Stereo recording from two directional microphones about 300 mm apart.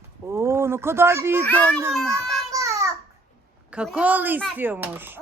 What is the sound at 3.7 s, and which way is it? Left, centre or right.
Speech, centre.